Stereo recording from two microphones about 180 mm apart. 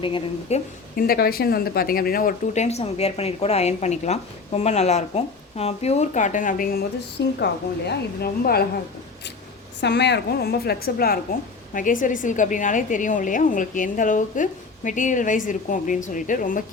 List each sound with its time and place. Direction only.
0.0 s speech: 35° left (ahead or behind)
0.9 s speech: 55° left (ahead or behind)
7.3 s a woman's voice: 65° left (ahead or behind)
9.8 s a woman's voice: 70° left (ahead or behind); by 16.6 s 50° left (ahead or behind)